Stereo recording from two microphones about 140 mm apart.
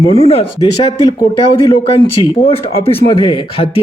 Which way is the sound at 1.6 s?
40° left (ahead or behind).